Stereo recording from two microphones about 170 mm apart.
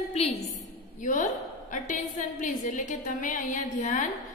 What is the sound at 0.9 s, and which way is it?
A woman's voice, 50° left (ahead or behind).